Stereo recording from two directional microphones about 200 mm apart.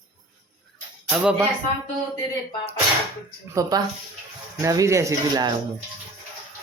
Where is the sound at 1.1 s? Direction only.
5° right (ahead or behind).